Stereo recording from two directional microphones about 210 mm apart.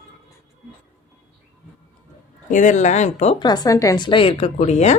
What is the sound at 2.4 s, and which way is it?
A woman's voice, 35° left (ahead or behind).